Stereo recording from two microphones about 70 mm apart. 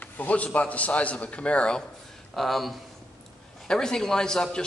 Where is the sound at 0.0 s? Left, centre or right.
Left.